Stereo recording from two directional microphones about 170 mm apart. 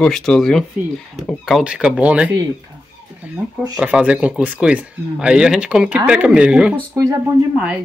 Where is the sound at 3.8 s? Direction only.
5° right (ahead or behind).